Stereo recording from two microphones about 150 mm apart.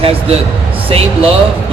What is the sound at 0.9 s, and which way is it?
Speech, 40° right (ahead or behind).